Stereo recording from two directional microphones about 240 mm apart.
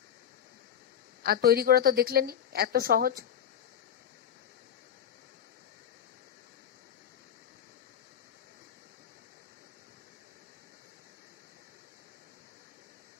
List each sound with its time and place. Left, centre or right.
1.2 s speech: right